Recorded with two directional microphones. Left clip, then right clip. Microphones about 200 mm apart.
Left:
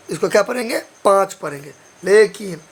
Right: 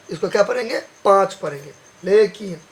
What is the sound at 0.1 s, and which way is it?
Speech, 35° left (ahead or behind).